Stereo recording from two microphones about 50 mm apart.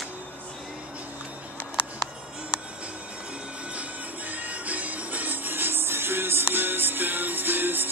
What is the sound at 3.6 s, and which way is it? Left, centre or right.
Music, right.